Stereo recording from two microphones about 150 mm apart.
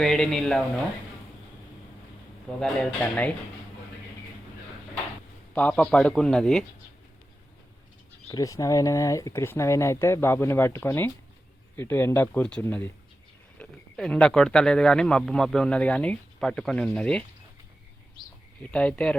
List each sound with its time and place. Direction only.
0.0 s speech: 5° left (ahead or behind)
2.6 s speech: 10° left (ahead or behind)
5.5 s speech: 10° left (ahead or behind)
8.3 s speech: 20° left (ahead or behind); by 17.2 s 5° left (ahead or behind)
18.6 s speech: 5° left (ahead or behind)